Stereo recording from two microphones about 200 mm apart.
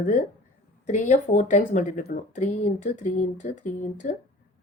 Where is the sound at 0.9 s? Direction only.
40° left (ahead or behind).